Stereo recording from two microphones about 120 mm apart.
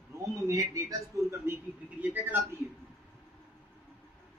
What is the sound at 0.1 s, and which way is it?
Speech, 25° right (ahead or behind).